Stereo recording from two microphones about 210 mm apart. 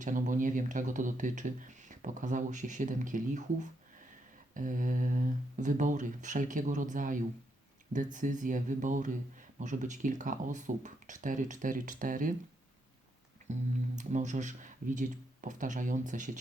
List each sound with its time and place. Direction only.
0.0 s speech: 40° right (ahead or behind)
13.5 s speech: 35° right (ahead or behind)